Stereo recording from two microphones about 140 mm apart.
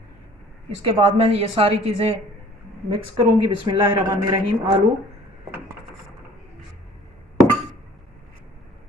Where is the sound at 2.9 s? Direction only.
35° right (ahead or behind).